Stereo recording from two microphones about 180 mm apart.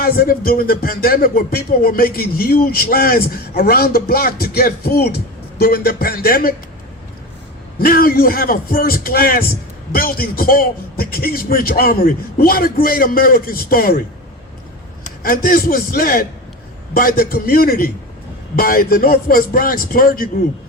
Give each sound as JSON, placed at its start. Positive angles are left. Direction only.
{"t": 0.0, "sound": "speech", "side_deg": 55}
{"t": 7.8, "sound": "speech", "side_deg": 55}
{"t": 15.0, "sound": "a man's voice", "side_deg": 55}